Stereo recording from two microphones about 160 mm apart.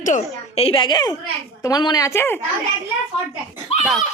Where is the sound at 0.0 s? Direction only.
55° left (ahead or behind).